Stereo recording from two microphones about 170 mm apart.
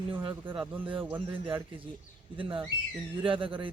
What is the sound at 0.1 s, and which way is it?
Speech, 30° right (ahead or behind).